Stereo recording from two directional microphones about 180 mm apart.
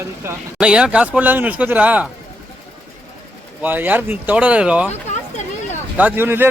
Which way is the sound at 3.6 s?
10° right (ahead or behind).